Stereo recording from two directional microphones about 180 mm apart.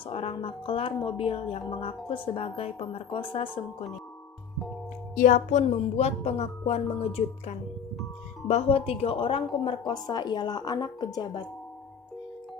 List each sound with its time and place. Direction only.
0.0 s speech: 30° left (ahead or behind)
5.1 s speech: 45° left (ahead or behind); by 11.4 s 20° left (ahead or behind)